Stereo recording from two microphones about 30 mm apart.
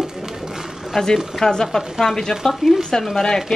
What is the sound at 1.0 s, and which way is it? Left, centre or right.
Speech, centre.